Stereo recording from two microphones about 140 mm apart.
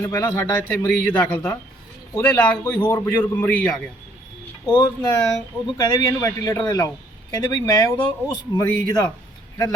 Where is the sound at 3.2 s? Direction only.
10° left (ahead or behind).